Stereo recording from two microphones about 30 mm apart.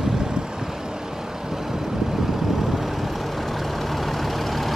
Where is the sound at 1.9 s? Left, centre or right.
Centre.